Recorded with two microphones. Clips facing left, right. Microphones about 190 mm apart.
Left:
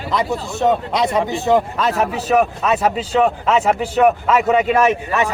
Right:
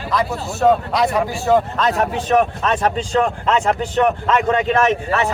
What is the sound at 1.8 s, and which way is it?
A man's voice, 5° left (ahead or behind).